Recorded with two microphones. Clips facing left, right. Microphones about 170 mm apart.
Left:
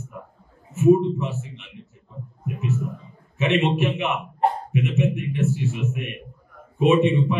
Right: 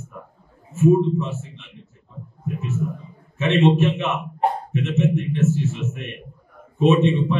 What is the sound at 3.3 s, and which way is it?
A man's voice, 15° left (ahead or behind).